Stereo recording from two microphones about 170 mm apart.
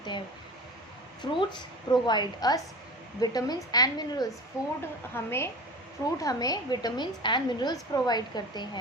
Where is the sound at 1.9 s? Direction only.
25° left (ahead or behind).